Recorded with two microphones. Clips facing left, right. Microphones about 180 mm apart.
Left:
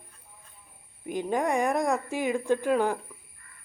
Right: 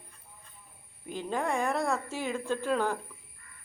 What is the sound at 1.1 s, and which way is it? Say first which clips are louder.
Speech: left 5 dB; 15° left (ahead or behind).